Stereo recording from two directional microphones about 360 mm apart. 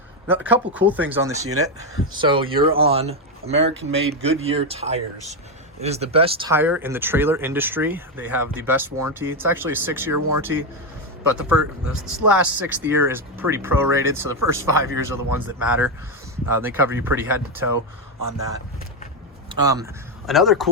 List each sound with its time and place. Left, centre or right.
0.3 s speech: centre
10.2 s speech: right
11.9 s speech: centre
18.2 s speech: right
19.5 s speech: centre